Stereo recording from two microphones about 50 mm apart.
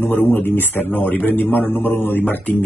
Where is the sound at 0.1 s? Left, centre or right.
Left.